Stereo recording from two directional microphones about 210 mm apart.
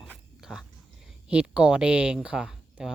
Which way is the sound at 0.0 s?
5° right (ahead or behind).